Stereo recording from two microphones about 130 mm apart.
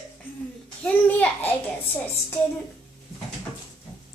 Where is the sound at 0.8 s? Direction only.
15° left (ahead or behind).